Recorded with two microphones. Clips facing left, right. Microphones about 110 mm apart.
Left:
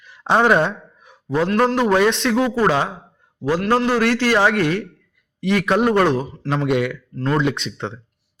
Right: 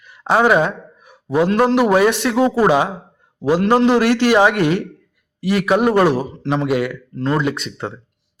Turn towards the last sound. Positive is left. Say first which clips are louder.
# right 1 dB
turn(degrees=-5)  # may be behind; listen again after turning